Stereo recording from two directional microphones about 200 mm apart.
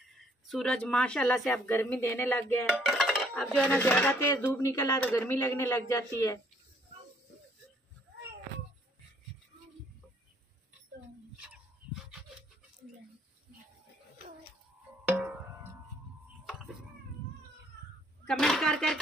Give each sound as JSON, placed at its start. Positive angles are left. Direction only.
{"t": 0.5, "sound": "speech", "side_deg": 5}
{"t": 2.8, "sound": "dishes", "side_deg": 0}
{"t": 4.6, "sound": "a man's voice", "side_deg": 15}
{"t": 11.4, "sound": "dog", "side_deg": 0}
{"t": 15.0, "sound": "music", "side_deg": -10}
{"t": 18.2, "sound": "speech", "side_deg": 0}